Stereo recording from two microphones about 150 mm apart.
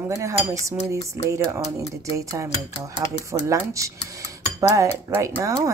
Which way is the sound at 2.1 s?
20° right (ahead or behind).